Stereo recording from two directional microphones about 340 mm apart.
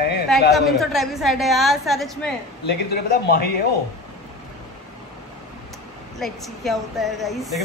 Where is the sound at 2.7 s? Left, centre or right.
Left.